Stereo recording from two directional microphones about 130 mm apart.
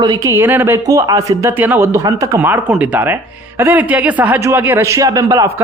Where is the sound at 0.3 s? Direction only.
15° right (ahead or behind).